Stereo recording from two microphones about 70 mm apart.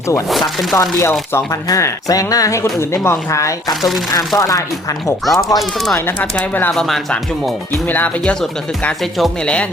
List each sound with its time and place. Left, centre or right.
0.3 s chopping: centre
0.8 s a woman's voice: left
1.6 s a woman's voice: left
5.2 s chopping: centre
6.1 s speech: left
6.7 s chopping: centre
7.9 s speech: left
8.2 s speech: centre